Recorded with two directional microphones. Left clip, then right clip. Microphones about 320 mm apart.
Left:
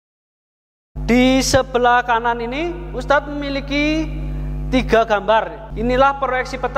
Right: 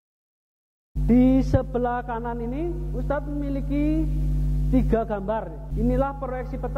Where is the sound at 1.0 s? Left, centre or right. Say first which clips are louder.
Left 6 dB; centre.